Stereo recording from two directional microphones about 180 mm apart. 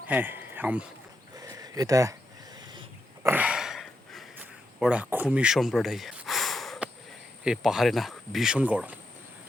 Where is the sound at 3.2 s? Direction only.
10° right (ahead or behind).